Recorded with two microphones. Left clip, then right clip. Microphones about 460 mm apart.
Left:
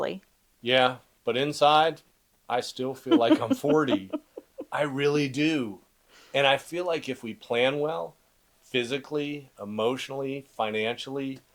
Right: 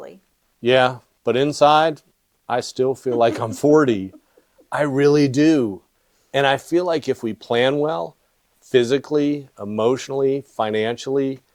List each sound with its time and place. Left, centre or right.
0.6 s speech: right